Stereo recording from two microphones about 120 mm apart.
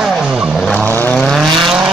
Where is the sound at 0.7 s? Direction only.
15° left (ahead or behind).